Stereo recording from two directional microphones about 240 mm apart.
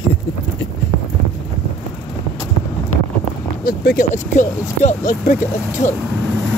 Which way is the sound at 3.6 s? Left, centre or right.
Left.